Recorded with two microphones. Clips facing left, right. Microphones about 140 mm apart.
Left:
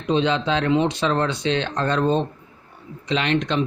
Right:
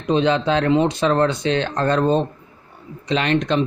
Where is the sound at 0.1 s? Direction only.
45° right (ahead or behind).